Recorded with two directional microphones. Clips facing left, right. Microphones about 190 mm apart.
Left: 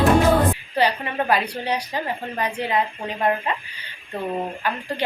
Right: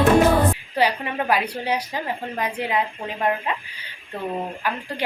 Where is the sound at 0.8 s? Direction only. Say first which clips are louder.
Even; 10° right (ahead or behind).